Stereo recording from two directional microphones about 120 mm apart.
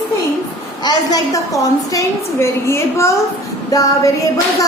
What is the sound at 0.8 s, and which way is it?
A woman's voice, 30° left (ahead or behind).